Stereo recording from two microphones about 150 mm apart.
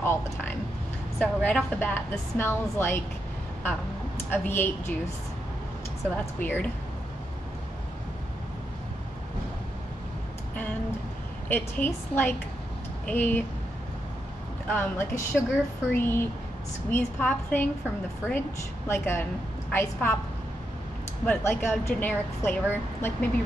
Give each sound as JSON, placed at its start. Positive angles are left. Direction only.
{"t": 0.0, "sound": "a sound", "side_deg": 15}
{"t": 1.2, "sound": "a woman's voice", "side_deg": 10}
{"t": 4.3, "sound": "a woman's voice", "side_deg": 15}
{"t": 6.1, "sound": "a woman's voice", "side_deg": 10}
{"t": 10.5, "sound": "a sound", "side_deg": 10}
{"t": 11.4, "sound": "a woman's voice", "side_deg": 10}
{"t": 14.7, "sound": "a woman's voice", "side_deg": 15}
{"t": 18.2, "sound": "a woman's voice", "side_deg": -10}
{"t": 18.9, "sound": "a woman's voice", "side_deg": 15}
{"t": 21.3, "sound": "a woman's voice", "side_deg": 15}